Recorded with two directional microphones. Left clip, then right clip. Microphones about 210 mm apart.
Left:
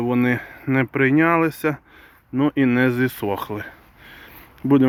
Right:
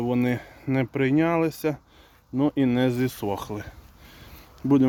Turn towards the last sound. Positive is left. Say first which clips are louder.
# left 4 dB
turn(degrees=0)  # may be behind; listen again after turning